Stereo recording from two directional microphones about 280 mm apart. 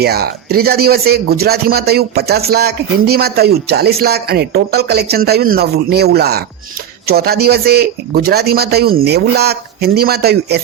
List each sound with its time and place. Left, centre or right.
0.0 s speech: right